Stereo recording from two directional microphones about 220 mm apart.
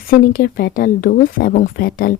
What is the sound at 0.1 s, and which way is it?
Speech, 40° left (ahead or behind).